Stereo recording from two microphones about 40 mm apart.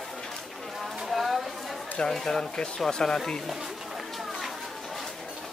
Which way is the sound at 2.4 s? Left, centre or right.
Centre.